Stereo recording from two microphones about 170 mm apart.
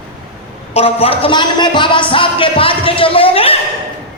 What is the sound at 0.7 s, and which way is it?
Speech, 35° left (ahead or behind).